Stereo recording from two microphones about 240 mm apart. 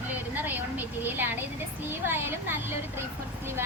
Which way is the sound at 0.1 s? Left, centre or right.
Centre.